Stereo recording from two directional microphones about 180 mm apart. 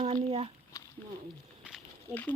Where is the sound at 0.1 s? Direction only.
30° right (ahead or behind).